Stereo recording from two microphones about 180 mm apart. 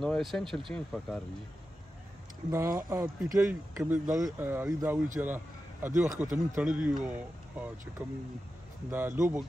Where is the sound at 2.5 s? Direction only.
15° right (ahead or behind).